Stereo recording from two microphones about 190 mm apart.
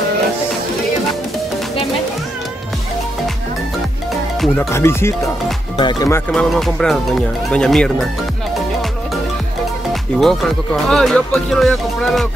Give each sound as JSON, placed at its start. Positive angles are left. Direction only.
{"t": 4.6, "sound": "music", "side_deg": 15}
{"t": 5.8, "sound": "speech", "side_deg": 20}
{"t": 6.3, "sound": "speech", "side_deg": 5}
{"t": 10.1, "sound": "speech", "side_deg": 5}